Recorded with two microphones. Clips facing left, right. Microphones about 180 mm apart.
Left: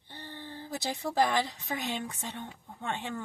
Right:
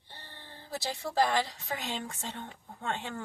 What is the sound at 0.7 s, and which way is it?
Speech, 20° left (ahead or behind).